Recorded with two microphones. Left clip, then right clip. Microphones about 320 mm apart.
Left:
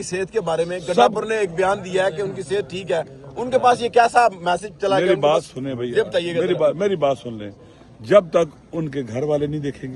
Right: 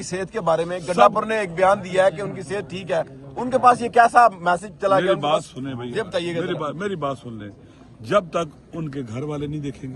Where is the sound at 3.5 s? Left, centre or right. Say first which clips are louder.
Even; centre.